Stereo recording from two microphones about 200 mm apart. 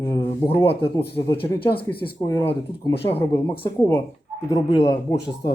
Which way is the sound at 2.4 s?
25° left (ahead or behind).